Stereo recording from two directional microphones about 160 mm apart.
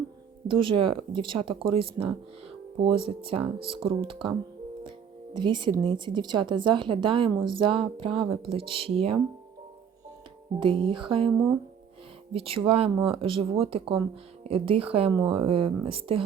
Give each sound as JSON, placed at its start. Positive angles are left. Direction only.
{"t": 0.4, "sound": "a woman's voice", "side_deg": -30}
{"t": 4.8, "sound": "music", "side_deg": -30}
{"t": 5.8, "sound": "a woman's voice", "side_deg": -30}
{"t": 10.6, "sound": "a woman's voice", "side_deg": -35}